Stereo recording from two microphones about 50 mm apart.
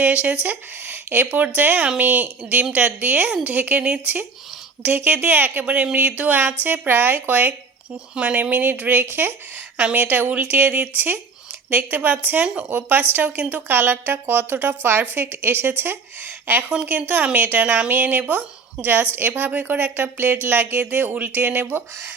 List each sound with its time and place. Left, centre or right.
0.0 s speech: right
6.5 s speech: right
8.1 s speech: right